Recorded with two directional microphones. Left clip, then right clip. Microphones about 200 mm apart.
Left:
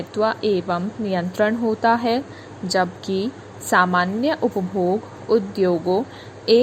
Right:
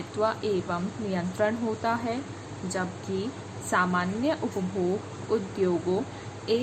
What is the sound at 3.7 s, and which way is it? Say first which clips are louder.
A woman's voice: left 9 dB; 40° left (ahead or behind).